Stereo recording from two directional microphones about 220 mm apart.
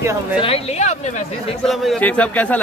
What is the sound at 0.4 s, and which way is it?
Speech, 25° left (ahead or behind).